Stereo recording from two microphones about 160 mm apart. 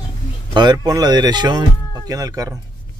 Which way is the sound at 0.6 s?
25° right (ahead or behind).